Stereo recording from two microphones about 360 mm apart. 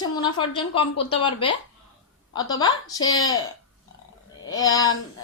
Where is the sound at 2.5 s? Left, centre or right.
Centre.